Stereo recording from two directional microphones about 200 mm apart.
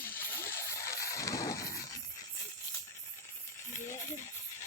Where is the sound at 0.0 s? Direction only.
10° left (ahead or behind).